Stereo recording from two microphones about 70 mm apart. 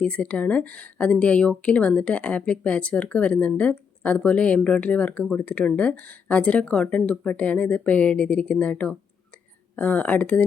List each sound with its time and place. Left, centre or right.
0.0 s speech: centre